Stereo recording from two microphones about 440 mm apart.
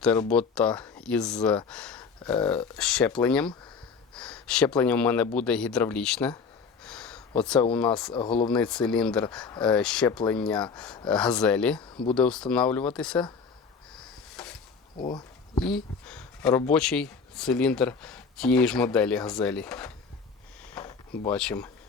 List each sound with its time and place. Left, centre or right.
0.0 s speech: centre
13.9 s a sound: centre
15.0 s speech: centre
21.2 s speech: centre